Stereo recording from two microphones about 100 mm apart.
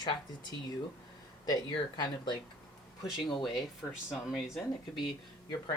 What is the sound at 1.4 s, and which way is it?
Speech, 45° left (ahead or behind).